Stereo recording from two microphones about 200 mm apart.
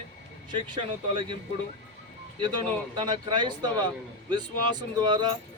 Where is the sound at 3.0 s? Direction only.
25° right (ahead or behind).